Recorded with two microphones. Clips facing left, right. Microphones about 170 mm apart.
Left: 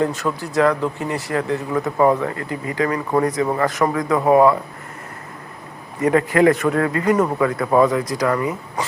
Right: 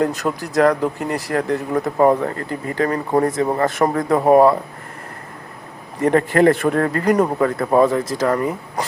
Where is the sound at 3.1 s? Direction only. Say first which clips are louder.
Right 2 dB; 25° right (ahead or behind).